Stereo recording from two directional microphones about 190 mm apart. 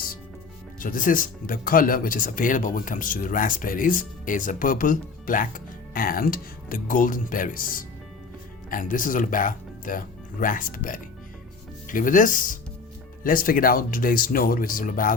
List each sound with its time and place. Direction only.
0.8 s speech: 45° left (ahead or behind)